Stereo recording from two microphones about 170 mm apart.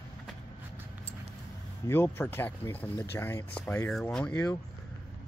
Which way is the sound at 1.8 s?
15° left (ahead or behind).